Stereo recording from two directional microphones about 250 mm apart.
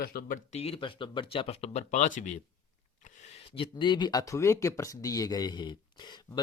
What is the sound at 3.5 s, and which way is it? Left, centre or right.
Speech, centre.